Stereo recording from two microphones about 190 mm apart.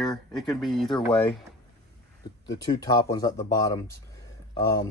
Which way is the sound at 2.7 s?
20° left (ahead or behind).